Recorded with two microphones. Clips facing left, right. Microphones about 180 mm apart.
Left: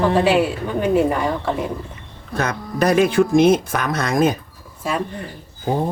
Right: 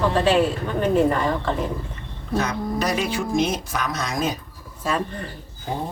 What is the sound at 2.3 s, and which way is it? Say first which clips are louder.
Speech: even; 55° left (ahead or behind).